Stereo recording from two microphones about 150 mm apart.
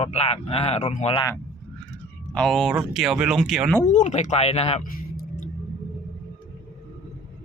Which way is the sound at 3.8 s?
55° left (ahead or behind).